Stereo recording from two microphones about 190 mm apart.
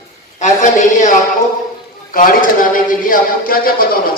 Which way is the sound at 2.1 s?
45° left (ahead or behind).